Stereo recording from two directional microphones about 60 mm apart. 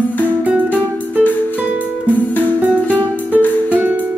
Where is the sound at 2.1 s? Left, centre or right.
Left.